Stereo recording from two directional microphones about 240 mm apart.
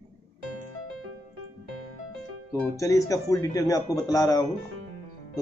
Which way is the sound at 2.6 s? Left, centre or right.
Centre.